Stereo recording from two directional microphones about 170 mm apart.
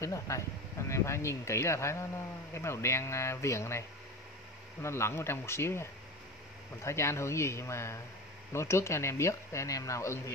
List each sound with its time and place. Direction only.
0.0 s speech: 20° left (ahead or behind)
4.8 s speech: 15° left (ahead or behind)